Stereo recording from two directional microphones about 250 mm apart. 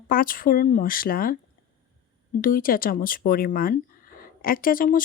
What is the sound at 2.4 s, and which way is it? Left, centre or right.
Speech, left.